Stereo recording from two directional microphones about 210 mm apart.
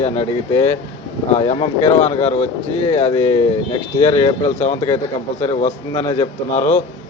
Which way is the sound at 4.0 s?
20° left (ahead or behind).